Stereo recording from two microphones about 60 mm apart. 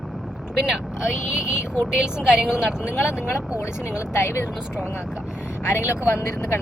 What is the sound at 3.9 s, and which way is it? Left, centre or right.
Speech, left.